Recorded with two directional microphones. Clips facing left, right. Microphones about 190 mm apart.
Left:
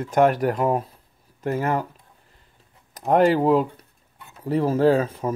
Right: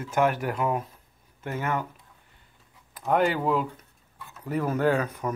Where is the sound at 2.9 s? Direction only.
40° left (ahead or behind).